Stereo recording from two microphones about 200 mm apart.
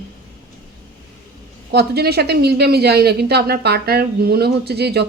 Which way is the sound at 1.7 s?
50° right (ahead or behind).